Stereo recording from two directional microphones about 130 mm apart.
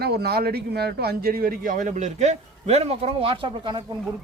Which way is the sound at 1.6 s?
90° right.